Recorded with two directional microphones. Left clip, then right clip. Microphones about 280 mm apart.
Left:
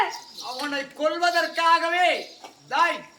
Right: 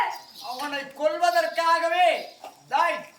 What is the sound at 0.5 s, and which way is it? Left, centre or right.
Speech, centre.